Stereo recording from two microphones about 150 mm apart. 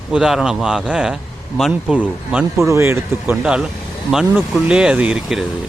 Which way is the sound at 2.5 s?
20° right (ahead or behind).